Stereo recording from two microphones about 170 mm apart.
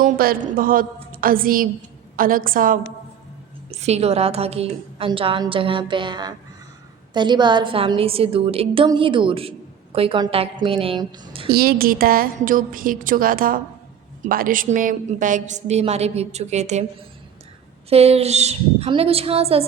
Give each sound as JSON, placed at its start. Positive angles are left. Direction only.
{"t": 0.0, "sound": "a woman's voice", "side_deg": -60}
{"t": 3.7, "sound": "a woman's voice", "side_deg": -40}
{"t": 11.5, "sound": "a woman's voice", "side_deg": -65}
{"t": 17.8, "sound": "a woman's voice", "side_deg": -35}